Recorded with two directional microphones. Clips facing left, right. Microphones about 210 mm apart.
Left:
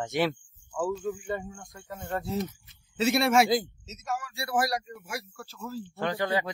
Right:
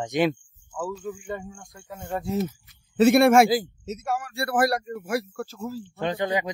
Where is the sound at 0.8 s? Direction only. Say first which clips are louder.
Left 2 dB; centre (ahead or behind).